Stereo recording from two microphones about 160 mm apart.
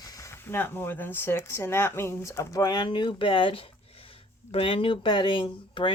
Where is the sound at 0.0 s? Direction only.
20° left (ahead or behind).